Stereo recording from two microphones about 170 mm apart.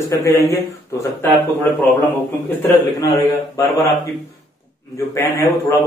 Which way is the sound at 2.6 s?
25° left (ahead or behind).